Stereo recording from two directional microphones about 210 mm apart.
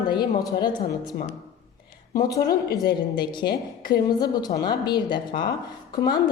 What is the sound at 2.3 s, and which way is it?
A woman's voice, 15° left (ahead or behind).